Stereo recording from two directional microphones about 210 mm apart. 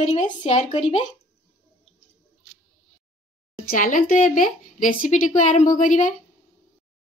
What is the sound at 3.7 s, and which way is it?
A woman's voice, 40° left (ahead or behind).